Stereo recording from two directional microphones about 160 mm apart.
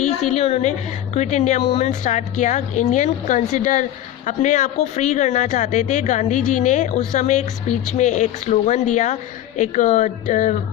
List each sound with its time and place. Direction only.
0.0 s a woman's voice: 45° left (ahead or behind)